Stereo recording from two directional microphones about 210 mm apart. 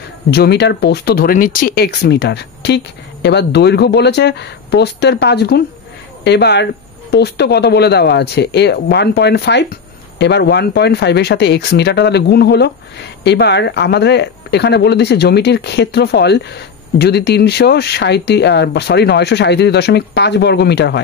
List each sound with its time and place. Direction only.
0.3 s speech: 50° left (ahead or behind)